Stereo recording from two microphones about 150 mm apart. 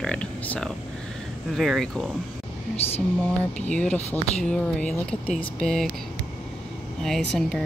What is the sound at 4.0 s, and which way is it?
Speech, 45° left (ahead or behind).